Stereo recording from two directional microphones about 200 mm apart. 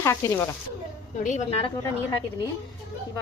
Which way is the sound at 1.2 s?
35° left (ahead or behind).